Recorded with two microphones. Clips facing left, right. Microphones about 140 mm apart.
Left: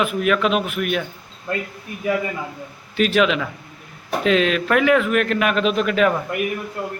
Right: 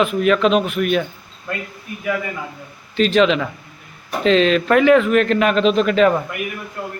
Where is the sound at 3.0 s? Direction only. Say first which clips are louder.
Right 3 dB; 5° left (ahead or behind).